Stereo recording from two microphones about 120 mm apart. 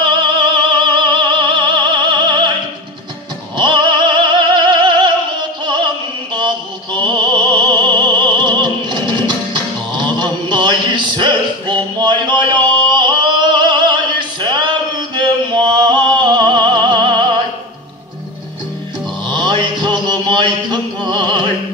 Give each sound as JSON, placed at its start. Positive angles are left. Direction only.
{"t": 0.0, "sound": "music", "side_deg": -40}
{"t": 3.5, "sound": "music", "side_deg": -40}
{"t": 6.3, "sound": "music", "side_deg": -40}
{"t": 9.9, "sound": "a sound", "side_deg": -40}
{"t": 12.6, "sound": "music", "side_deg": -40}
{"t": 14.4, "sound": "a sound", "side_deg": -40}
{"t": 19.2, "sound": "mantra", "side_deg": -40}